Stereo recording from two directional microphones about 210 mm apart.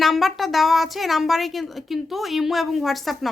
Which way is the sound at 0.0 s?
Centre (ahead or behind).